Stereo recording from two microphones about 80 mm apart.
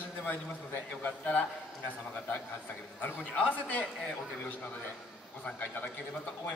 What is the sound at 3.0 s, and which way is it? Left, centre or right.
Speech, centre.